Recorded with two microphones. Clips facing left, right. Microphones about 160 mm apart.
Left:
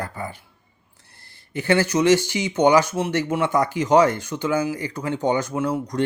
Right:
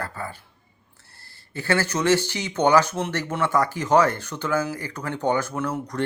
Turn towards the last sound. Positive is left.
turn(degrees=15)  # may be behind; listen again after turning